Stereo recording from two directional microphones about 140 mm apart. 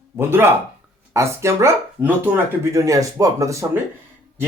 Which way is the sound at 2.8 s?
25° right (ahead or behind).